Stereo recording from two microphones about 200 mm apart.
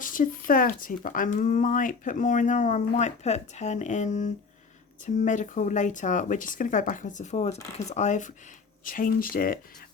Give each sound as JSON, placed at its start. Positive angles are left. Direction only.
{"t": 0.0, "sound": "speech", "side_deg": 40}